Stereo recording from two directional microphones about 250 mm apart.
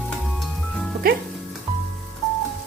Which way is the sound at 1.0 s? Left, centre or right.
Right.